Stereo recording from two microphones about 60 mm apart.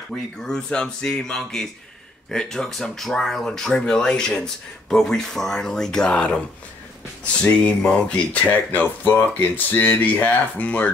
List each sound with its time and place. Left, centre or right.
0.4 s speech: centre
7.4 s speech: left